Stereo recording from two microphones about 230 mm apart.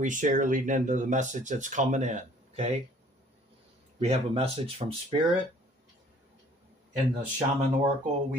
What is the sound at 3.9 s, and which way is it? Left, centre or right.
Speech, right.